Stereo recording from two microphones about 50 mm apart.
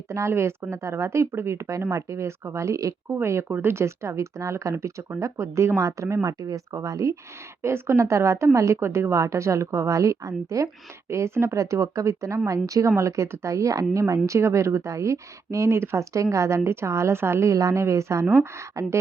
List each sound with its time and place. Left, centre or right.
0.1 s a woman's voice: right
3.1 s speech: right
3.5 s a woman's voice: right
7.6 s a woman's voice: right
11.1 s a woman's voice: right
17.4 s a woman's voice: right